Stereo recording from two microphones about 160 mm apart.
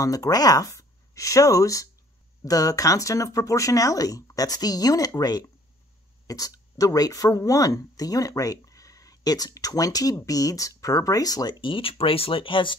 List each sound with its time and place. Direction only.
0.0 s speech: 20° left (ahead or behind)